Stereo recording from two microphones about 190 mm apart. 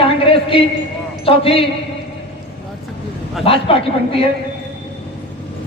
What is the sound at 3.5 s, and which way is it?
Speech, 30° left (ahead or behind).